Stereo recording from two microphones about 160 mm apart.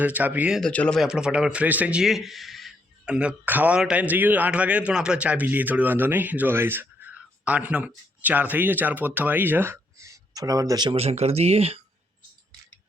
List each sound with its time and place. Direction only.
0.0 s a man's voice: 10° right (ahead or behind)
0.6 s a man's voice: 5° left (ahead or behind); by 10.9 s 25° right (ahead or behind)
10.9 s speech: 40° right (ahead or behind)